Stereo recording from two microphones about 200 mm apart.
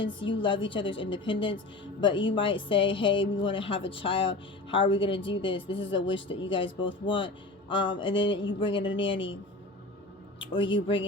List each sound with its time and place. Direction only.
0.3 s speech: 25° left (ahead or behind)
9.0 s speech: 65° left (ahead or behind)
10.4 s speech: 25° left (ahead or behind)